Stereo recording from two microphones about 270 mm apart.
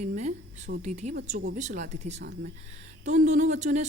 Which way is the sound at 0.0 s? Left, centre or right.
Right.